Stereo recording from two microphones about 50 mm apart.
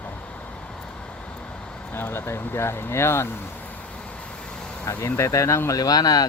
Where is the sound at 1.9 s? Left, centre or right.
Left.